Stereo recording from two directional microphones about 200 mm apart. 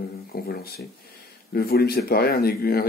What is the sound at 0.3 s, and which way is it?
Speech, 50° left (ahead or behind).